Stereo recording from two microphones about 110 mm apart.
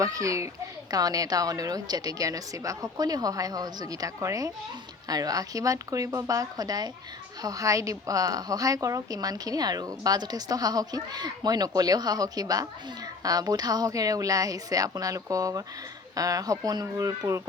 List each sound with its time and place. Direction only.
0.0 s a woman's voice: 30° right (ahead or behind)